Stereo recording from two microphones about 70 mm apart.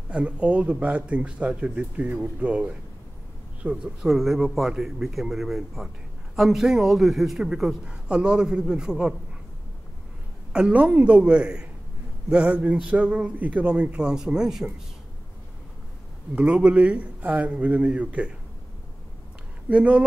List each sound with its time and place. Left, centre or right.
0.1 s a man's voice: centre
10.7 s a man's voice: right
14.0 s a man's voice: centre
16.3 s speech: centre
19.7 s speech: centre